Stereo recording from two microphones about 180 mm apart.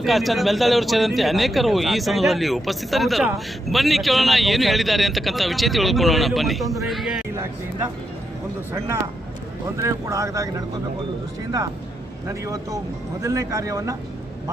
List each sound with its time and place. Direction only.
0.0 s speech: centre (ahead or behind)
9.7 s speech: 15° right (ahead or behind)
12.3 s speech: 20° right (ahead or behind)